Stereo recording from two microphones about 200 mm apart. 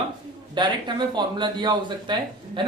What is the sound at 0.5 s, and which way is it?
A man's voice, 20° right (ahead or behind).